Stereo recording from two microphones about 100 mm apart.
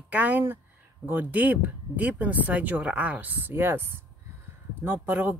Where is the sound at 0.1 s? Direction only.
15° right (ahead or behind).